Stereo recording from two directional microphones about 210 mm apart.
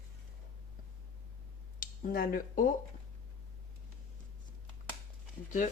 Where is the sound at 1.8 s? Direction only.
40° left (ahead or behind).